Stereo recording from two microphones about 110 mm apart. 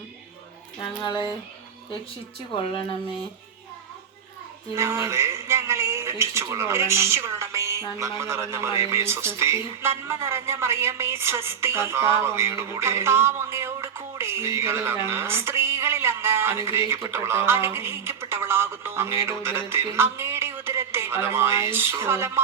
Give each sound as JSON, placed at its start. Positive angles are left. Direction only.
{"t": 0.8, "sound": "speech", "side_deg": 45}
{"t": 4.7, "sound": "speech", "side_deg": -25}